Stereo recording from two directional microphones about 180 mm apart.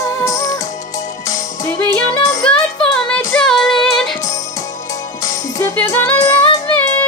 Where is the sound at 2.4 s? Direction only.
5° left (ahead or behind).